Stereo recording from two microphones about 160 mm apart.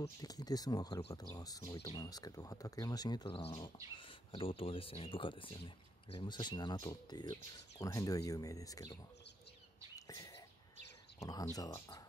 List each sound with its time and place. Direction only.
0.2 s speech: 25° left (ahead or behind)
9.9 s a sound: 20° left (ahead or behind)
11.1 s speech: 20° left (ahead or behind)